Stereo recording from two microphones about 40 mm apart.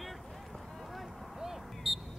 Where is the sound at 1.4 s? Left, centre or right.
Centre.